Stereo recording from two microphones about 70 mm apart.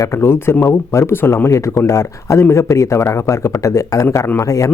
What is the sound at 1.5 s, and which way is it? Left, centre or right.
Speech, left.